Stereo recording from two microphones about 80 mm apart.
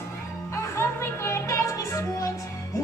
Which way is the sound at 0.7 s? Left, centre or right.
Left.